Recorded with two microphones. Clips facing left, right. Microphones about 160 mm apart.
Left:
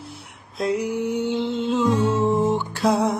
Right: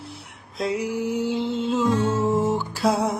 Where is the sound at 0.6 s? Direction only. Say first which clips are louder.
Left 2 dB; centre (ahead or behind).